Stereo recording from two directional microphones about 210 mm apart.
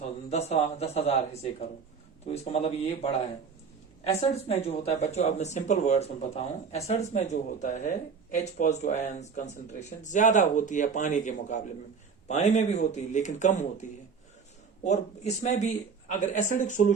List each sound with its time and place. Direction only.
0.3 s speech: 30° left (ahead or behind)
14.8 s speech: 35° left (ahead or behind)